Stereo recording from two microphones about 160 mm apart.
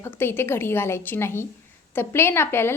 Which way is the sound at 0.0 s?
15° left (ahead or behind).